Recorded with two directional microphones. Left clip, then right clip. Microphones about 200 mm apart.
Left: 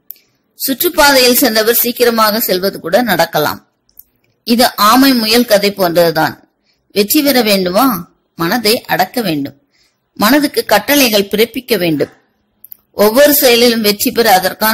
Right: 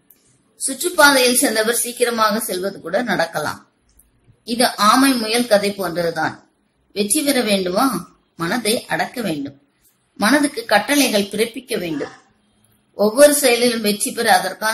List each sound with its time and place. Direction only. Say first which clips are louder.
0.7 s a woman's voice: left 4 dB; 40° left (ahead or behind)
12.9 s a woman's voice: left 4 dB; 40° left (ahead or behind)